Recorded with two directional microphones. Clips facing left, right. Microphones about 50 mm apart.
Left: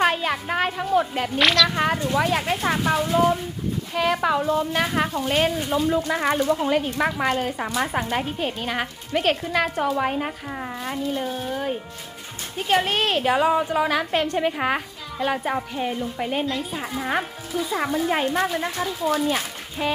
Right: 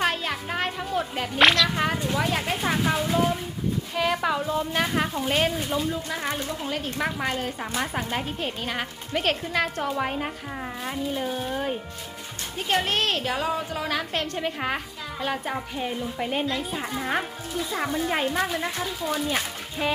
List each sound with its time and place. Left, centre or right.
0.0 s a sound: centre
1.4 s a woman's voice: centre
1.7 s a woman's voice: centre
5.9 s speech: left
7.8 s a woman's voice: centre